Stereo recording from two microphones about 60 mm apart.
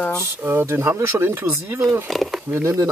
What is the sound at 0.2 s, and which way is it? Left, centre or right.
Speech, right.